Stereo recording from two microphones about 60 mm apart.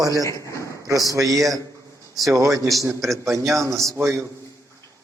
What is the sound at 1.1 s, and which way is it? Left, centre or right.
A man's voice, right.